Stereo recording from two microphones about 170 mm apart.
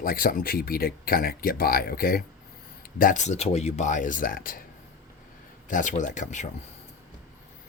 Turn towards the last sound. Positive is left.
turn(degrees=45)  # may be behind; listen again after turning